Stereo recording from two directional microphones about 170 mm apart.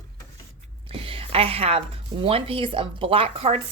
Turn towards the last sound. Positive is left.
turn(degrees=-35)  # may be behind; listen again after turning